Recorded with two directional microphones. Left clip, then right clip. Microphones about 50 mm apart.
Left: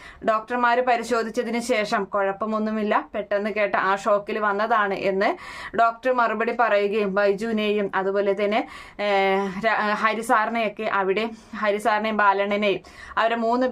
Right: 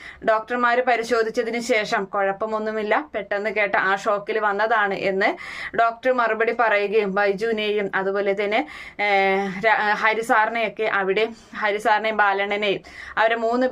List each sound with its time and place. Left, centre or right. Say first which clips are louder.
0.3 s speech: right 1 dB; left